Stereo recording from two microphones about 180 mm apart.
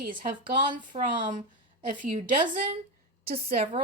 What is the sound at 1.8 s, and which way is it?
Speech, 50° right (ahead or behind).